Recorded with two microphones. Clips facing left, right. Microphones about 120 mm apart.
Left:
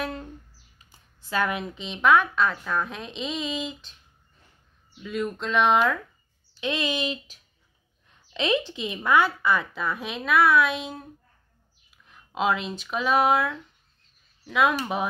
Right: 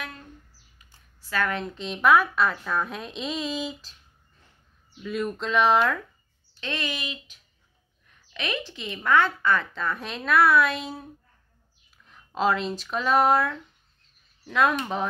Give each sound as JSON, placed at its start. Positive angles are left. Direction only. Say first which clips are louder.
{"t": 1.3, "sound": "speech", "louder": "left 1 dB", "side_deg": 15}
{"t": 1.6, "sound": "speech", "louder": "right 1 dB", "side_deg": 0}
{"t": 5.0, "sound": "speech", "louder": "even", "side_deg": 0}
{"t": 6.6, "sound": "speech", "louder": "left 5 dB", "side_deg": 15}